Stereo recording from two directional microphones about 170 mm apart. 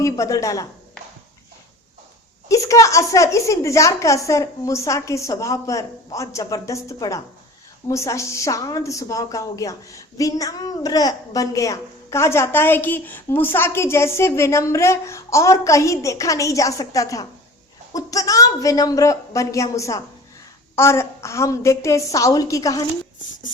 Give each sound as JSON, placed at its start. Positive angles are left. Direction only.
{"t": 0.0, "sound": "a woman's voice", "side_deg": 20}
{"t": 2.5, "sound": "a woman's voice", "side_deg": 20}